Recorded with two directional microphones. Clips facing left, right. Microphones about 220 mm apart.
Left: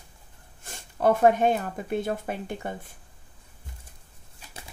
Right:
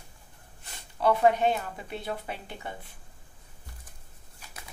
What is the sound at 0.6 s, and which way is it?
Speech, 45° left (ahead or behind).